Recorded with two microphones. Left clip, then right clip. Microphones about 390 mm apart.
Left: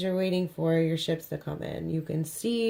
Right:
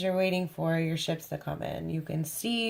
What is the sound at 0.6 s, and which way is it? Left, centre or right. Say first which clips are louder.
Speech: left 5 dB; right.